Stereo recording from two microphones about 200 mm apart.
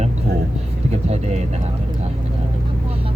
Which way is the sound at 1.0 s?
35° right (ahead or behind).